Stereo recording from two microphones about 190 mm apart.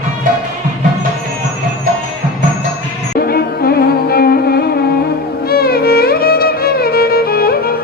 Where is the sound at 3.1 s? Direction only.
50° left (ahead or behind).